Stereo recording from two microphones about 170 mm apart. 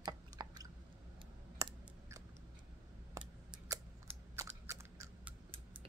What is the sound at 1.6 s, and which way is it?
Scissors, 20° right (ahead or behind).